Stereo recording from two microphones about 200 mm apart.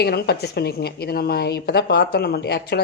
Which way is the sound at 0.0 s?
55° left (ahead or behind).